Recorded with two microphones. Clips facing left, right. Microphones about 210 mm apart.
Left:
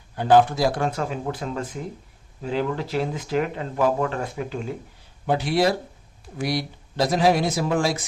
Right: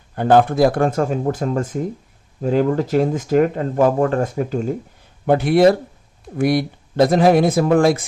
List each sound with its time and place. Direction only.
0.2 s speech: 55° right (ahead or behind)
5.2 s speech: 55° right (ahead or behind)